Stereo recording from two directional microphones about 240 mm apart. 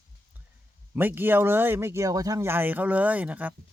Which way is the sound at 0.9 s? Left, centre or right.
Centre.